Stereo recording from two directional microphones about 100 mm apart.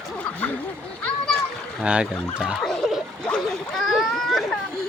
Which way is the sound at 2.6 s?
5° left (ahead or behind).